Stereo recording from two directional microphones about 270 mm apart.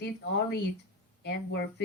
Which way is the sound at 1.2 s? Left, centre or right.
Left.